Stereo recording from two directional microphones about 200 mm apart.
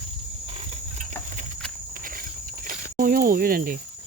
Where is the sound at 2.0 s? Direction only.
45° right (ahead or behind).